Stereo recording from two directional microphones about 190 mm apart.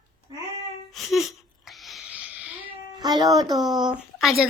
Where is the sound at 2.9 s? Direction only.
20° right (ahead or behind).